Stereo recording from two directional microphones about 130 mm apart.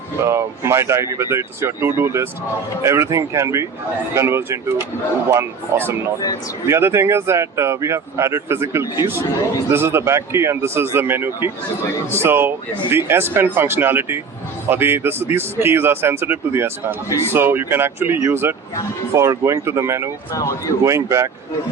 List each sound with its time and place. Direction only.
0.3 s speech: 20° right (ahead or behind)
17.1 s speech: 20° left (ahead or behind)
17.3 s speech: 15° right (ahead or behind)
20.3 s speech: 25° left (ahead or behind)
20.8 s speech: 20° right (ahead or behind)